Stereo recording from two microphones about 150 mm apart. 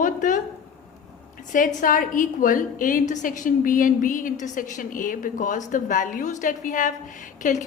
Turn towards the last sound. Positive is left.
turn(degrees=60)  # may be behind; listen again after turning